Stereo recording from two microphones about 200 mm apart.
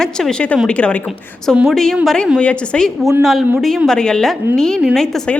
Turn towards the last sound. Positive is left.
turn(degrees=0)  # may be behind; listen again after turning